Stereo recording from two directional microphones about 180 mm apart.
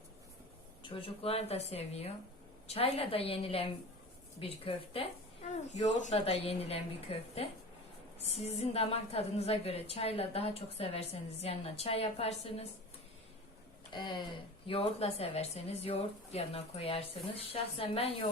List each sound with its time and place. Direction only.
0.8 s a woman's voice: 30° left (ahead or behind)
13.9 s a woman's voice: 25° left (ahead or behind)